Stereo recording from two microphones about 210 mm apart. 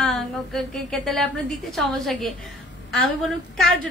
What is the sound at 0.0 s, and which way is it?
A woman's voice, centre (ahead or behind).